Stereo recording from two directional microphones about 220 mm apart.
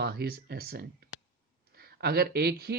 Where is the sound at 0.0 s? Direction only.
45° right (ahead or behind).